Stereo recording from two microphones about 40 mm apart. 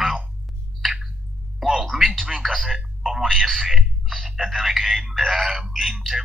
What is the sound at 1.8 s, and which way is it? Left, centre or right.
Speech, centre.